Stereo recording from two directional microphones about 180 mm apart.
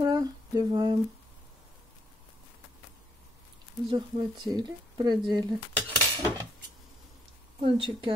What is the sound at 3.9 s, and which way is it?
Speech, 25° right (ahead or behind).